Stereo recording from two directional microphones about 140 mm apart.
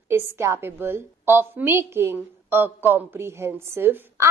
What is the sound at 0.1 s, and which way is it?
A woman's voice, 15° right (ahead or behind).